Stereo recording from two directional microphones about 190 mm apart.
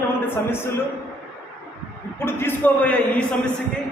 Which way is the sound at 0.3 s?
10° left (ahead or behind).